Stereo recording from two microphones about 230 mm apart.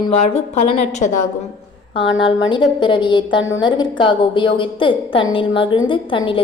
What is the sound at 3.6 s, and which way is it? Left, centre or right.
A woman's voice, centre.